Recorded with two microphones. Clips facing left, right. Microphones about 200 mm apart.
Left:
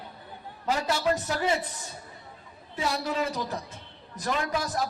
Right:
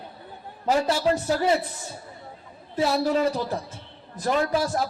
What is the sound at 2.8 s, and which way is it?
A man's voice, 35° right (ahead or behind).